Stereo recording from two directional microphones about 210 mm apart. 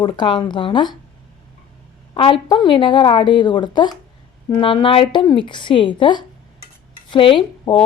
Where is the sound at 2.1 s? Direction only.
25° left (ahead or behind).